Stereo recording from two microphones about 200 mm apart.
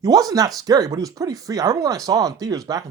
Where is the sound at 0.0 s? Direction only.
20° right (ahead or behind).